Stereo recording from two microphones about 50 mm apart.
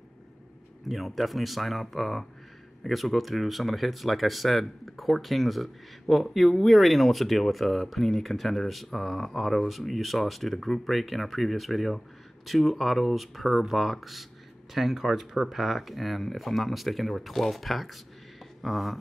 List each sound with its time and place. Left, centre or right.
0.8 s speech: centre